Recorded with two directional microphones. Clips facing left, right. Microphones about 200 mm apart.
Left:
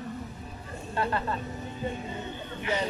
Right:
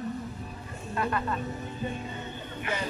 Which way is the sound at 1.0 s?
30° left (ahead or behind).